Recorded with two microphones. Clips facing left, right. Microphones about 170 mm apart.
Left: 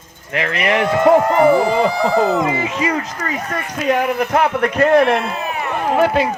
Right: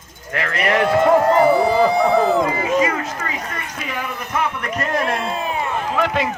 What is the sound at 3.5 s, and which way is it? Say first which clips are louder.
A man's voice: left 10 dB; 70° left (ahead or behind).